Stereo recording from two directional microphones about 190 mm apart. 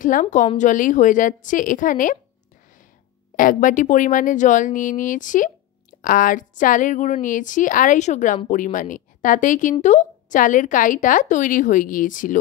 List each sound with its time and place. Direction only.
0.0 s speech: 45° left (ahead or behind)
3.3 s speech: 45° left (ahead or behind)